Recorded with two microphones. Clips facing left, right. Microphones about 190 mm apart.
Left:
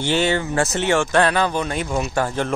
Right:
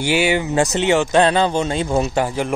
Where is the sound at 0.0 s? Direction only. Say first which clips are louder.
Right 2 dB; 10° right (ahead or behind).